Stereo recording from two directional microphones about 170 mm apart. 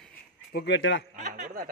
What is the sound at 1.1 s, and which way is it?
Snicker, 50° right (ahead or behind).